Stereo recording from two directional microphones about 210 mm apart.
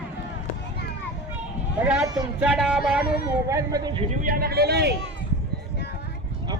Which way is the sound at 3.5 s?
15° right (ahead or behind).